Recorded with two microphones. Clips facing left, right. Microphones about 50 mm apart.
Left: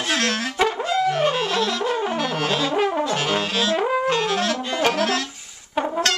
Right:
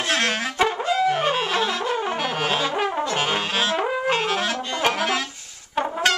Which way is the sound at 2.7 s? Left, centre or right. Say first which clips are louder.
Left 2 dB; centre.